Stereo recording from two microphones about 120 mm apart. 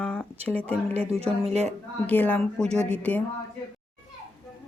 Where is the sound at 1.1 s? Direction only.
60° right (ahead or behind).